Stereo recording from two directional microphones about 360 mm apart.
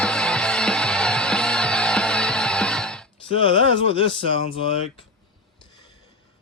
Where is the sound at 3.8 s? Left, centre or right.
Right.